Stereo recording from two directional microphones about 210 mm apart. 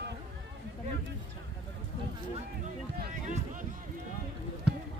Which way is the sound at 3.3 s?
40° right (ahead or behind).